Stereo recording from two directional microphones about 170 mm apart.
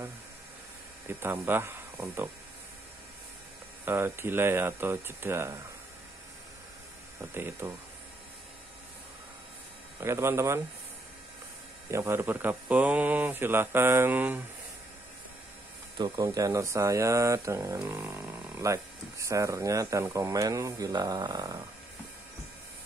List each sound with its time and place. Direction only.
1.0 s speech: 15° right (ahead or behind)
3.8 s speech: 15° right (ahead or behind)
7.3 s speech: 15° right (ahead or behind)
9.9 s speech: 15° right (ahead or behind)
11.9 s speech: 15° right (ahead or behind)
16.0 s speech: 20° right (ahead or behind)